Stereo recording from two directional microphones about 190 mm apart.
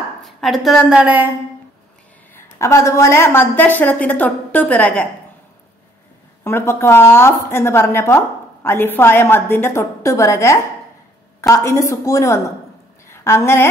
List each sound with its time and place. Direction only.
0.2 s a woman's voice: centre (ahead or behind)
2.3 s a woman's voice: 15° left (ahead or behind)
6.4 s a woman's voice: 15° left (ahead or behind)